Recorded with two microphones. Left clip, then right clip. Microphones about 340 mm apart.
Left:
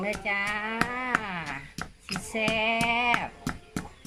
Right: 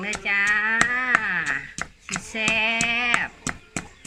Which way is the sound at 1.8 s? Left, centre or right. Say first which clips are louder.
Right 5 dB; centre.